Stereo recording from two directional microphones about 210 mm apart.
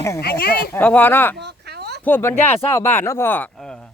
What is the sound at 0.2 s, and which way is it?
Speech, 50° left (ahead or behind).